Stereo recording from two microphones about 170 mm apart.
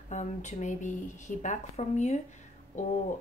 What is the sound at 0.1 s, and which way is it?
Speech, 45° left (ahead or behind).